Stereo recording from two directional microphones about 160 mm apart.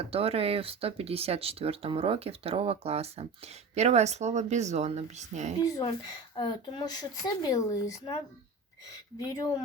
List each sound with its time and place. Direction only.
0.0 s speech: 40° right (ahead or behind)
5.6 s speech: 25° left (ahead or behind)